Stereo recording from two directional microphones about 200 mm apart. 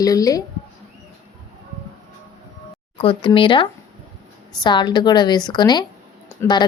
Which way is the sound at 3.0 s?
25° left (ahead or behind).